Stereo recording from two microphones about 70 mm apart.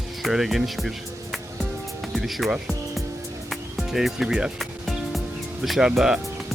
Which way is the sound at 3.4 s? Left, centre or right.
Centre.